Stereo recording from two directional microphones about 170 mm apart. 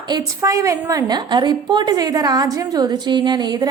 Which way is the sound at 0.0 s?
25° right (ahead or behind).